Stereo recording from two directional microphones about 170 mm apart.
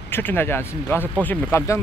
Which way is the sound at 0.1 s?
10° left (ahead or behind).